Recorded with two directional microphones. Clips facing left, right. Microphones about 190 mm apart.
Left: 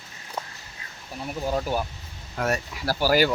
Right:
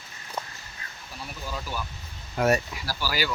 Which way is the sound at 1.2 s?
50° left (ahead or behind).